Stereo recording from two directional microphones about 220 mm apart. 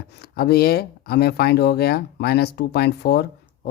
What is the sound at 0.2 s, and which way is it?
Speech, 45° left (ahead or behind).